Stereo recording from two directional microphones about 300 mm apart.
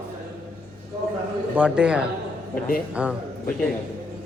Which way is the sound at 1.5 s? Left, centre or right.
Centre.